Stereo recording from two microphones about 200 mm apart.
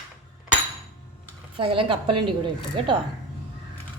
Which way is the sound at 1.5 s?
25° right (ahead or behind).